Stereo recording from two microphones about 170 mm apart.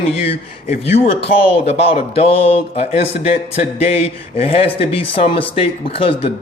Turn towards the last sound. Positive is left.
turn(degrees=30)  # may be behind; listen again after turning